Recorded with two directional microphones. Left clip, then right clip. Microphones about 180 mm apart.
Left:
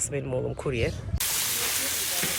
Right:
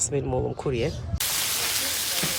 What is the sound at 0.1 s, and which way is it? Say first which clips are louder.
Speech: right 3 dB; 10° right (ahead or behind).